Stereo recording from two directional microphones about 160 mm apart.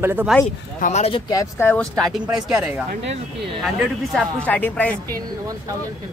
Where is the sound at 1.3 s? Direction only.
15° left (ahead or behind); by 2.8 s 5° right (ahead or behind).